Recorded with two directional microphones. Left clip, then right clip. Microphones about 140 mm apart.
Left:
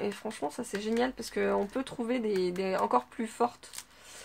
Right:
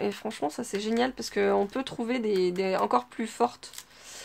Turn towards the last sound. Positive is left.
turn(degrees=-40)  # may be behind; listen again after turning